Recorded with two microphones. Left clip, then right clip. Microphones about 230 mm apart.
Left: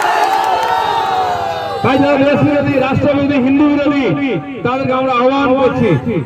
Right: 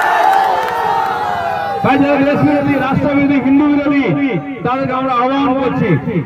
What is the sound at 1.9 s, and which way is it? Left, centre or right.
A man's voice, left.